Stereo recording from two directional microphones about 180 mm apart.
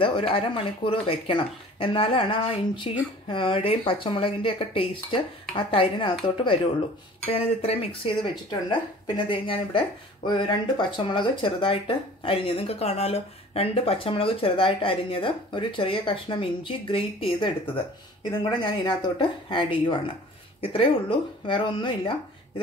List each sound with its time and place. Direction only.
0.0 s speech: 30° left (ahead or behind)